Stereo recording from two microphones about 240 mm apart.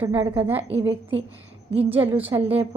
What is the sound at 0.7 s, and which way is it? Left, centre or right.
Speech, right.